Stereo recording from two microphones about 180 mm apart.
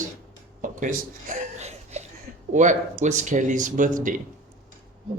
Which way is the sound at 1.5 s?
40° right (ahead or behind).